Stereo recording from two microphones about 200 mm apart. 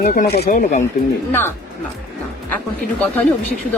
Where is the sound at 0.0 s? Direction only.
40° left (ahead or behind).